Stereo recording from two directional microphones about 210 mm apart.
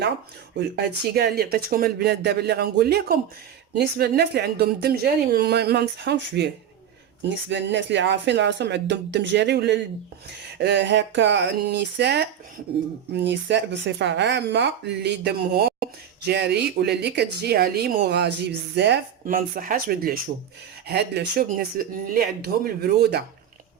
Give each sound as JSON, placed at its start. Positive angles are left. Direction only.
{"t": 0.8, "sound": "speech", "side_deg": -50}